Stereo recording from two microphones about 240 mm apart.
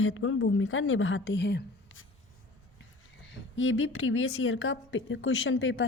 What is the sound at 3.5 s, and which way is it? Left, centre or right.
A woman's voice, left.